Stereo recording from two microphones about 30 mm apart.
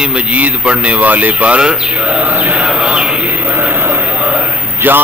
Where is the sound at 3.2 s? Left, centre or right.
Right.